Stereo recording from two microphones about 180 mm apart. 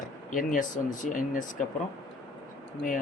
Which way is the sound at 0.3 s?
45° left (ahead or behind).